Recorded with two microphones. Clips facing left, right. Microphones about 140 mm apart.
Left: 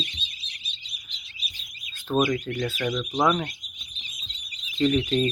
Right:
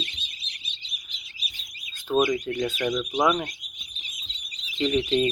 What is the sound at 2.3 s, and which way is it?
Speech, 15° right (ahead or behind).